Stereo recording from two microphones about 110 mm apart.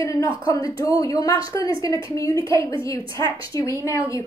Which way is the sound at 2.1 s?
30° left (ahead or behind).